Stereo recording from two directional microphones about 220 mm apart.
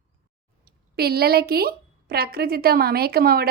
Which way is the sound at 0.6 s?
45° right (ahead or behind).